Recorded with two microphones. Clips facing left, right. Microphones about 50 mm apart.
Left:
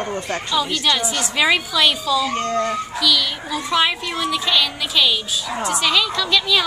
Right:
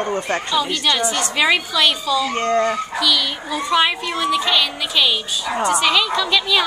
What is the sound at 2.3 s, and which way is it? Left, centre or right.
A woman's voice, centre.